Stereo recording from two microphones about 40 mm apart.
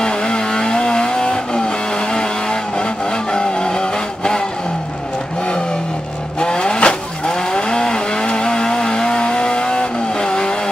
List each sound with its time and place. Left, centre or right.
0.0 s vehicle: centre
6.4 s vehicle: left